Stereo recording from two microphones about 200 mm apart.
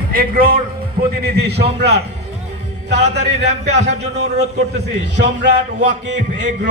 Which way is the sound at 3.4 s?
60° right (ahead or behind).